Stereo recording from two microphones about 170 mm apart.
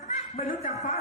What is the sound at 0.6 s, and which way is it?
Speech, 40° left (ahead or behind).